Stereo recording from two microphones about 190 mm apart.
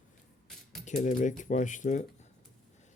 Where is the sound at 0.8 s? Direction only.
40° left (ahead or behind).